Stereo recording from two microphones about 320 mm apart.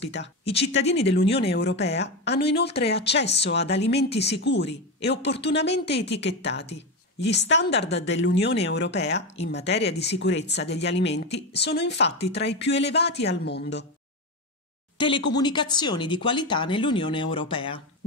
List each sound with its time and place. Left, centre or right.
0.0 s a woman's voice: left
1.5 s a woman's voice: left
15.0 s speech: centre